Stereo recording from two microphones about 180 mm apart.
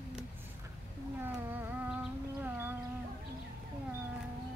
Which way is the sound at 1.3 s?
10° right (ahead or behind).